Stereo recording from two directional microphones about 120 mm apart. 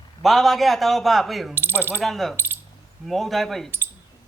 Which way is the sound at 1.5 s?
20° right (ahead or behind).